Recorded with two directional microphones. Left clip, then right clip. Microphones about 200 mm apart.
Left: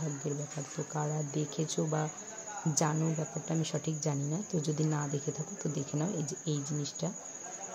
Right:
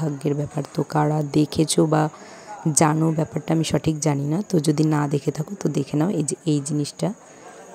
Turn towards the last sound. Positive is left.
turn(degrees=-50)  # may be behind; listen again after turning